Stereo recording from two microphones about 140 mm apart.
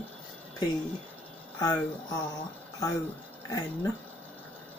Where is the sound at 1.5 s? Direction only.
25° left (ahead or behind).